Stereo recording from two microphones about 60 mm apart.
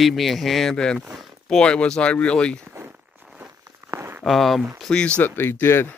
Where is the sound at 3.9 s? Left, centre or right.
Right.